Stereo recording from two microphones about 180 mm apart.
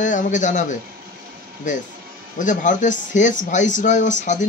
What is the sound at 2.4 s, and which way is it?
Speech, 45° left (ahead or behind).